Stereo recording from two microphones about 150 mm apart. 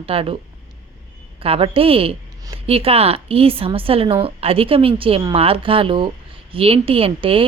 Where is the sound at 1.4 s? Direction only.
40° right (ahead or behind).